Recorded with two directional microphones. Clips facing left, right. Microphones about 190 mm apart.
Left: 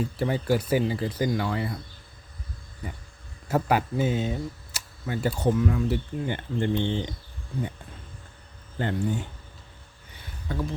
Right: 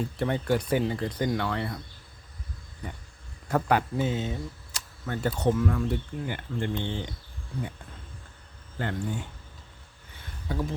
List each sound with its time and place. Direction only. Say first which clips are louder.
0.0 s speech: left 1 dB; 5° left (ahead or behind)
2.8 s speech: left 1 dB; 5° left (ahead or behind)
6.2 s speech: left 6 dB; 25° left (ahead or behind)
8.8 s speech: left 4 dB; 20° left (ahead or behind)
10.5 s speech: even; 10° right (ahead or behind)